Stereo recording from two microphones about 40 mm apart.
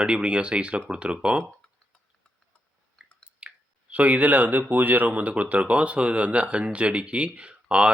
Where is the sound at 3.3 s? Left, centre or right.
Right.